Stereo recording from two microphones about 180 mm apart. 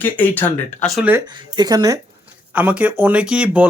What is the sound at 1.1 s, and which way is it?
Speech, 25° right (ahead or behind).